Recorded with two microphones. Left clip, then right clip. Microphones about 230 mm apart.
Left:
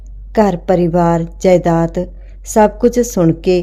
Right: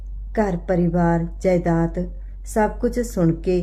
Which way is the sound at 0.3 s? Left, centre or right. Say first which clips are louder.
Left 9 dB; left.